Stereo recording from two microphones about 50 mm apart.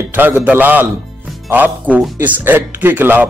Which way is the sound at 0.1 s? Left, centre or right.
Right.